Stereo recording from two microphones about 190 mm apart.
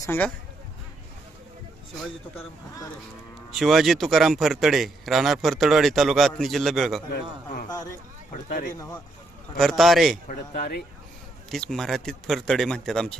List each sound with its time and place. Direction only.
0.0 s speech: 15° left (ahead or behind)
3.5 s a man's voice: centre (ahead or behind)
7.7 s speech: 20° left (ahead or behind)
8.4 s a man's voice: 45° left (ahead or behind)
9.6 s a man's voice: centre (ahead or behind)
10.2 s a man's voice: 50° left (ahead or behind)
11.5 s a man's voice: centre (ahead or behind)